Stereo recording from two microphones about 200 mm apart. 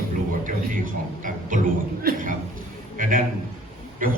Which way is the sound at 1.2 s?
40° right (ahead or behind).